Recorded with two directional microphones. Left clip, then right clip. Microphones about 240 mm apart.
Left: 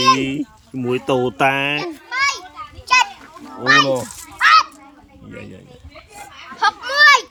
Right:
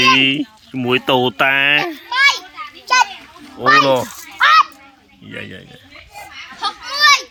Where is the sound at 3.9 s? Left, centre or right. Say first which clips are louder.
Right 5 dB; centre.